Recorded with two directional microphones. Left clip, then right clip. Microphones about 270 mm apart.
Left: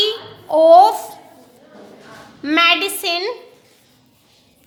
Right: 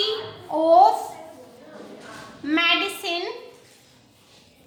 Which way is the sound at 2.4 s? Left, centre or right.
Left.